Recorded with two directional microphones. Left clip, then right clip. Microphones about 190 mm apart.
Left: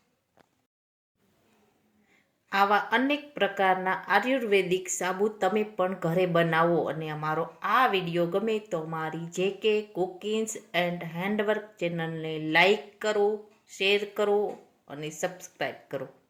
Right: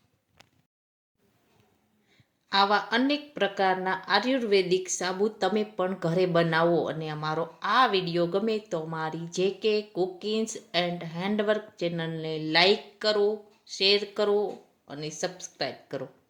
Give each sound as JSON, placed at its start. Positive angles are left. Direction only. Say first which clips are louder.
{"t": 2.5, "sound": "speech", "louder": "even", "side_deg": -10}
{"t": 5.2, "sound": "speech", "louder": "even", "side_deg": -25}